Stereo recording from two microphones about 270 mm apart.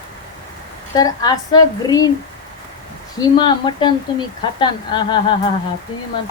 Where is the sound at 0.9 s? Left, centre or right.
Centre.